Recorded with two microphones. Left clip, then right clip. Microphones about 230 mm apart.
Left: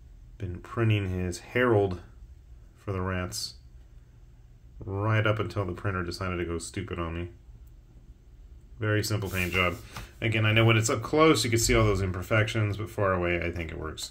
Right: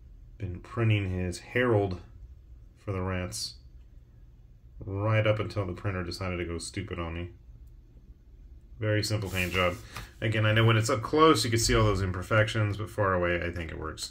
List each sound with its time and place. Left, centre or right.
0.4 s speech: centre
4.7 s speech: centre
8.7 s speech: centre